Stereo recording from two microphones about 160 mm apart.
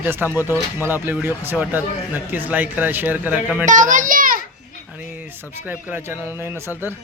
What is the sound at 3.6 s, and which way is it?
Speech, 50° right (ahead or behind).